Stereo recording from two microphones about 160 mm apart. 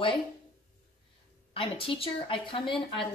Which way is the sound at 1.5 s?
35° left (ahead or behind).